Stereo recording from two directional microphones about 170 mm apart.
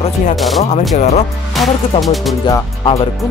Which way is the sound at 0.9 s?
40° left (ahead or behind).